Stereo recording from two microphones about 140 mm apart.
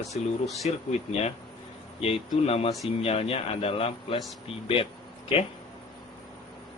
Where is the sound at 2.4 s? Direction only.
45° left (ahead or behind).